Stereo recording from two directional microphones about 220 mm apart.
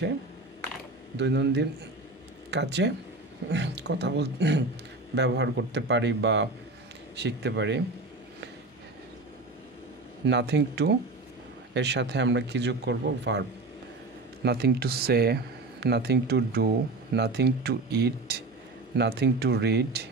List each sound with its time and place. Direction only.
1.1 s speech: 50° right (ahead or behind)
10.2 s speech: 50° right (ahead or behind)